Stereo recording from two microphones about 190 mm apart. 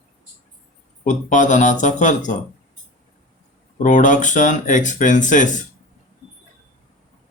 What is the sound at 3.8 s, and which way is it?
Speech, 40° left (ahead or behind).